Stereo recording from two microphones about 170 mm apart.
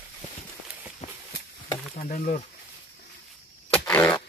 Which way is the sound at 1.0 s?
40° left (ahead or behind).